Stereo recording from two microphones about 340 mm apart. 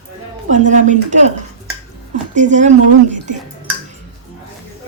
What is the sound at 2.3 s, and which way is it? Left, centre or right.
Speech, right.